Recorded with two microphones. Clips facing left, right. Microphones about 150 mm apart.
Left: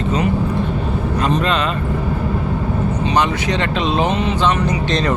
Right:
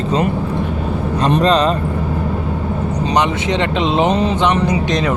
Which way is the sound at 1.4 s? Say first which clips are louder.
Right 5 dB; 35° right (ahead or behind).